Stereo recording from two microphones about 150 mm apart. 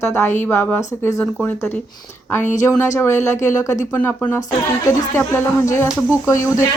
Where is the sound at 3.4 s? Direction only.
20° left (ahead or behind).